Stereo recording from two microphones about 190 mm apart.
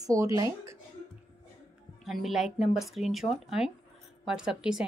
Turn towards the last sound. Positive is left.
turn(degrees=-5)  # may be behind; listen again after turning